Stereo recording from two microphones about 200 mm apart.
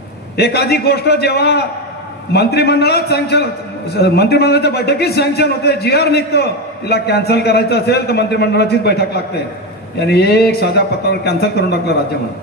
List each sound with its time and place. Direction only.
0.4 s a man's voice: 55° left (ahead or behind)